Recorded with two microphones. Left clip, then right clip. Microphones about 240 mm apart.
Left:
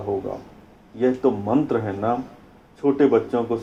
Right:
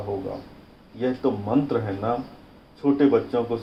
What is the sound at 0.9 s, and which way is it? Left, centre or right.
Speech, left.